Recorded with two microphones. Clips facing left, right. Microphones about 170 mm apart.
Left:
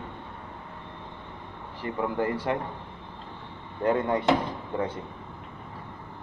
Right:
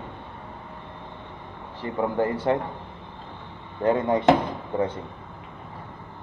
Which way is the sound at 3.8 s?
20° right (ahead or behind).